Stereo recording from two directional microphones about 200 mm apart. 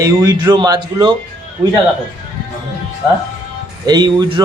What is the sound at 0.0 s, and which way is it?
A man's voice, 20° right (ahead or behind).